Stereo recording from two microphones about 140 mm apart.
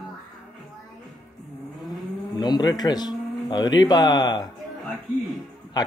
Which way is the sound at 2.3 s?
30° left (ahead or behind).